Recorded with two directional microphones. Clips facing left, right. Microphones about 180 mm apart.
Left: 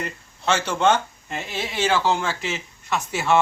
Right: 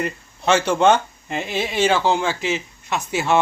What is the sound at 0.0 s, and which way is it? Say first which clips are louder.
Speech: right 5 dB; 15° right (ahead or behind).